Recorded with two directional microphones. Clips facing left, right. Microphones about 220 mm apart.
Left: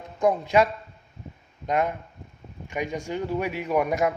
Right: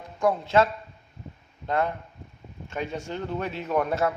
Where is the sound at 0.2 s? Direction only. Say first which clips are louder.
Left 1 dB; 15° left (ahead or behind).